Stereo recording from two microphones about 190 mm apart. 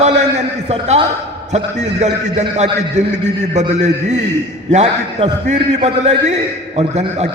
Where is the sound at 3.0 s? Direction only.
35° right (ahead or behind).